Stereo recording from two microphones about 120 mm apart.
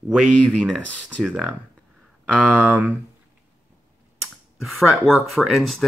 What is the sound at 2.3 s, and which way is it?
Speech, 15° right (ahead or behind).